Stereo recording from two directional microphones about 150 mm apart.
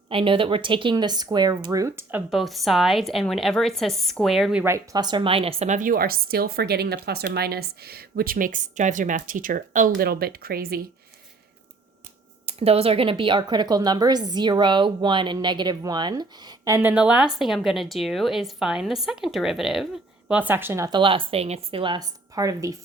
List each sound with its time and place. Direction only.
0.1 s speech: 35° right (ahead or behind); by 2.2 s 15° right (ahead or behind)
2.3 s a woman's voice: centre (ahead or behind)
4.6 s a woman's voice: 20° right (ahead or behind); by 10.8 s 90° right
12.5 s speech: 45° right (ahead or behind); by 16.9 s 20° right (ahead or behind)
16.9 s a woman's voice: 5° right (ahead or behind)
20.9 s speech: 35° right (ahead or behind)